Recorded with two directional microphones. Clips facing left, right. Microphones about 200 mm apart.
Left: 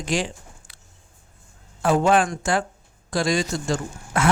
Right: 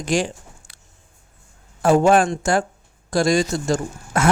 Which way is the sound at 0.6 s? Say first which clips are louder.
Even; 75° right (ahead or behind).